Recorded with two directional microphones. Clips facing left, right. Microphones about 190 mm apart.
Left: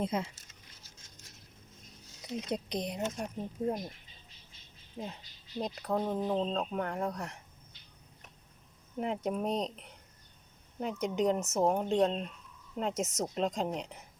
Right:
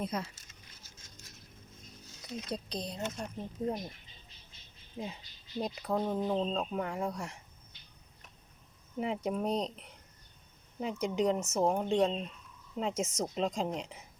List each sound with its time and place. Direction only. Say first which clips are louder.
0.0 s speech: left 3 dB; 25° left (ahead or behind)
2.2 s speech: left 3 dB; 20° left (ahead or behind)
3.6 s speech: left 1 dB; centre (ahead or behind)
5.0 s speech: right 1 dB; 5° right (ahead or behind)
9.0 s speech: even; centre (ahead or behind)